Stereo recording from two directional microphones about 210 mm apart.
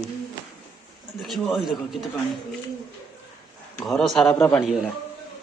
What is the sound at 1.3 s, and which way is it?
Speech, centre (ahead or behind).